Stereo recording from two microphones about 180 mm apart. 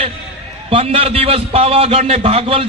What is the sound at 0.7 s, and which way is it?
A man's voice, 30° right (ahead or behind).